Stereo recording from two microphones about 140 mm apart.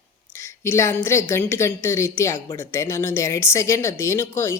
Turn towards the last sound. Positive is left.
turn(degrees=20)  # may be behind; listen again after turning